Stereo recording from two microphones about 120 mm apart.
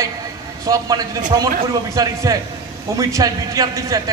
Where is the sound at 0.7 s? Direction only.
30° right (ahead or behind).